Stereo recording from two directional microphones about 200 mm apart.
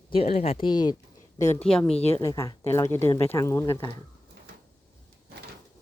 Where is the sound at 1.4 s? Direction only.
35° left (ahead or behind).